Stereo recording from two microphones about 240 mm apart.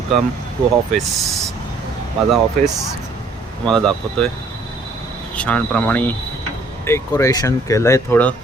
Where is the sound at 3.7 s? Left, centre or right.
Centre.